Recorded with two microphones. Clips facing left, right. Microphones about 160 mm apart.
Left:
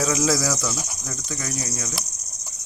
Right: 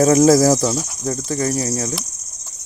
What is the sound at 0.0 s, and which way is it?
Speech, 45° right (ahead or behind).